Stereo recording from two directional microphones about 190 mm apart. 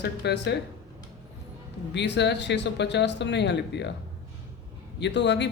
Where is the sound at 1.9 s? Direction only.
65° left (ahead or behind).